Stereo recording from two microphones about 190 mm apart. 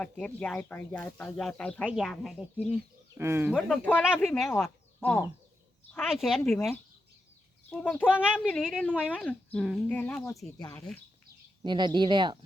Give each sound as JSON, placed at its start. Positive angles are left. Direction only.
{"t": 0.0, "sound": "speech", "side_deg": 5}
{"t": 3.2, "sound": "speech", "side_deg": -15}
{"t": 3.5, "sound": "speech", "side_deg": 5}
{"t": 5.9, "sound": "a child's voice", "side_deg": 0}
{"t": 8.0, "sound": "speech", "side_deg": -5}
{"t": 10.6, "sound": "a child's voice", "side_deg": 15}
{"t": 11.6, "sound": "speech", "side_deg": -25}